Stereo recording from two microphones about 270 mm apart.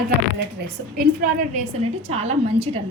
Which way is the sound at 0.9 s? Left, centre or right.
Right.